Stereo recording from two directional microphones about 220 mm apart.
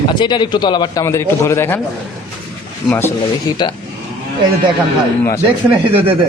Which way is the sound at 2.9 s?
10° left (ahead or behind).